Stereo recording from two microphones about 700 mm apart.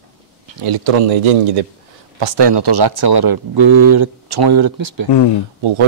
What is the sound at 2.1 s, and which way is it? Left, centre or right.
Speech, right.